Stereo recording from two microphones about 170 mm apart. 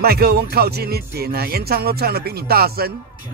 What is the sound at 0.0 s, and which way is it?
Speech, 70° right (ahead or behind).